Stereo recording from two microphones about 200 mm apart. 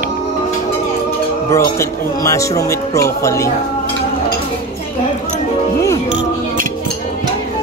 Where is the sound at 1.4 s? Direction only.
15° left (ahead or behind).